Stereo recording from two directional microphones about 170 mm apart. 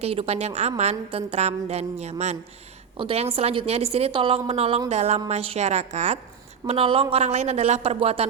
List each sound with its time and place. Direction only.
0.0 s a woman's voice: 35° right (ahead or behind)